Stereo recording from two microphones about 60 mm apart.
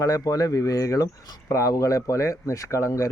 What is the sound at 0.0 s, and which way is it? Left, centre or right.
Speech, left.